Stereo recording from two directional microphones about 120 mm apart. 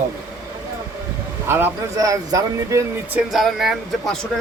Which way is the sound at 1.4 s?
20° right (ahead or behind).